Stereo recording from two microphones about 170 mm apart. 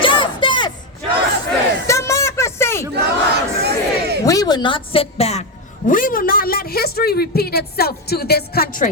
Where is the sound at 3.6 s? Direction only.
75° right (ahead or behind).